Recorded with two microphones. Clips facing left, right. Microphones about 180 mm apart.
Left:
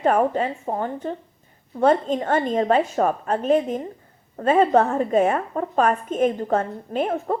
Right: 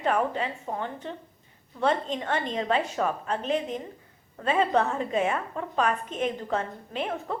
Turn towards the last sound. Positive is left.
turn(degrees=45)  # may be behind; listen again after turning